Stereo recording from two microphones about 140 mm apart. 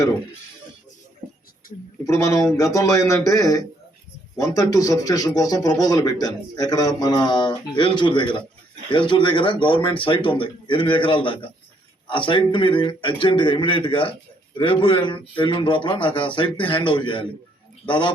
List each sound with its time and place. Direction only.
2.0 s speech: 20° left (ahead or behind)